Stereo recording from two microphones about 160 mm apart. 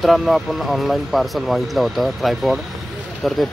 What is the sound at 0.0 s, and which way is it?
Speech, centre (ahead or behind).